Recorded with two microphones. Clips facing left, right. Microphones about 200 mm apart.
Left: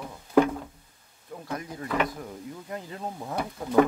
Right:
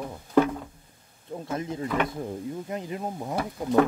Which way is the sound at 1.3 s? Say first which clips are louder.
Right 4 dB; 25° right (ahead or behind).